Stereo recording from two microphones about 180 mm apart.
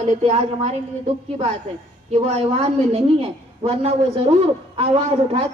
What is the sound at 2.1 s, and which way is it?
A woman's voice, 35° right (ahead or behind).